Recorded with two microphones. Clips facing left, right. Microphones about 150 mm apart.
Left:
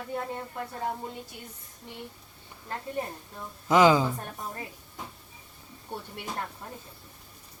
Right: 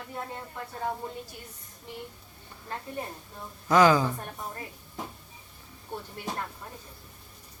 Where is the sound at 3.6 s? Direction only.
20° left (ahead or behind).